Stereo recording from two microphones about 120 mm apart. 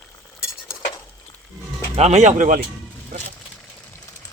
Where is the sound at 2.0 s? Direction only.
75° right (ahead or behind); by 2.5 s 90° right.